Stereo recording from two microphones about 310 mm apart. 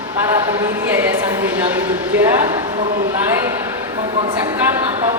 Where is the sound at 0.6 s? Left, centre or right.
Centre.